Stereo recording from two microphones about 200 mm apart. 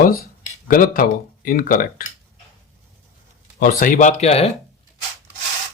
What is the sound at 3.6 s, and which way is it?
Speech, 45° left (ahead or behind).